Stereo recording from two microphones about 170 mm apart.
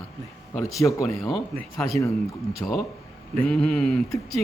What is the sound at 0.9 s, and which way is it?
Speech, 20° left (ahead or behind).